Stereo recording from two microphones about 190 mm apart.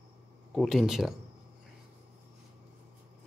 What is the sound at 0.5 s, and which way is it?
Speech, centre (ahead or behind).